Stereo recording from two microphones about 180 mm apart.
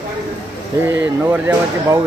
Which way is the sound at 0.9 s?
10° right (ahead or behind).